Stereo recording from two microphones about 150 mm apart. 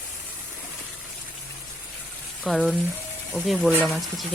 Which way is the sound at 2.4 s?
Centre (ahead or behind).